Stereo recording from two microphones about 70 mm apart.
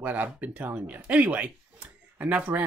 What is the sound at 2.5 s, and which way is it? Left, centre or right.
Speech, right.